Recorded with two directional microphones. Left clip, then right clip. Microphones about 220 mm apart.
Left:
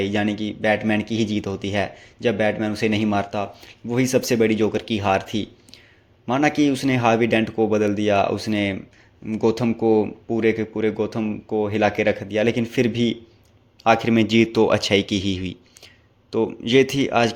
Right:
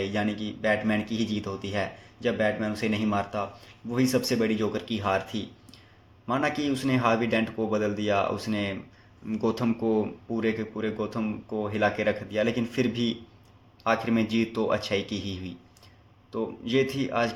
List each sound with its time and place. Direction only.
0.0 s speech: 40° left (ahead or behind)